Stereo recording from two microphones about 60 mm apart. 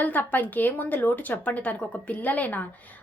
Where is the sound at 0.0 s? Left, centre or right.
Left.